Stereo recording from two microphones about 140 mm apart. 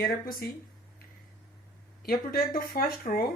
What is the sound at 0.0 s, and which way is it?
Speech, 90° left.